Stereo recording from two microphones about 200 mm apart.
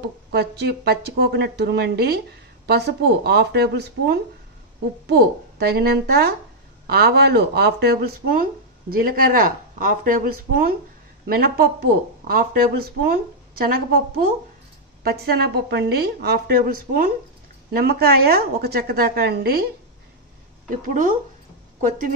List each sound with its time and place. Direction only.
0.0 s speech: 55° right (ahead or behind)
15.0 s speech: 50° right (ahead or behind)
20.7 s speech: 40° right (ahead or behind)